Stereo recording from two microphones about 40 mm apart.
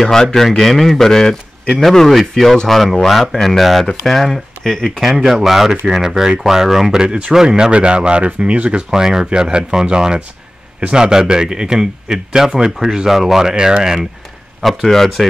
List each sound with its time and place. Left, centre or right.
0.0 s speech: centre
5.0 s speech: centre; by 8.8 s right
8.9 s speech: centre
14.6 s speech: centre